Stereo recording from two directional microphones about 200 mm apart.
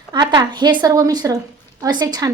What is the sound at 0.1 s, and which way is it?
A woman's voice, 20° right (ahead or behind).